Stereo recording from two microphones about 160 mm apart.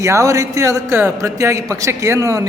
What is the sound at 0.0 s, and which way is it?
A man's voice, 20° right (ahead or behind).